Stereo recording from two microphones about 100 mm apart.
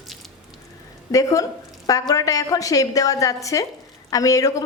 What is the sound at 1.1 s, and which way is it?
A woman's voice, 35° left (ahead or behind).